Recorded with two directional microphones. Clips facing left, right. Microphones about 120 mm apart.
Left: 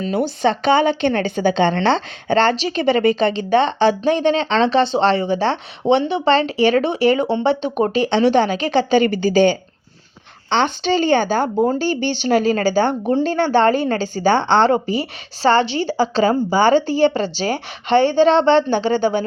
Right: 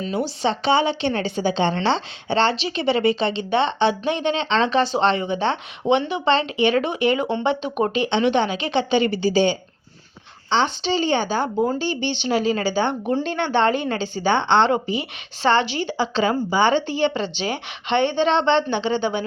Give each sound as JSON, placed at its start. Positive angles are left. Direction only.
{"t": 0.0, "sound": "speech", "side_deg": 50}